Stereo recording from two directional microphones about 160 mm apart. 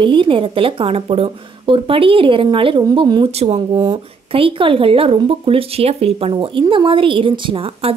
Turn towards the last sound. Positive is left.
turn(degrees=-35)  # may be behind; listen again after turning